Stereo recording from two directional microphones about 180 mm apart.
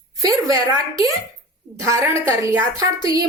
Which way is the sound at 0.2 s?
20° right (ahead or behind).